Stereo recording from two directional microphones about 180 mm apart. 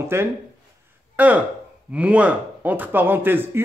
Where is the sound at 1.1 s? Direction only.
10° right (ahead or behind).